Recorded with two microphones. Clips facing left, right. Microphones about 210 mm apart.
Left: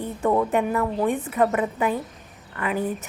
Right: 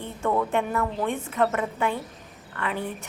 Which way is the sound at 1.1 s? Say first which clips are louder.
Left 3 dB; 5° left (ahead or behind).